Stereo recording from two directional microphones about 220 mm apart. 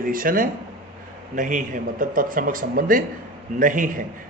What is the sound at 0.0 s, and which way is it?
A man's voice, 40° right (ahead or behind).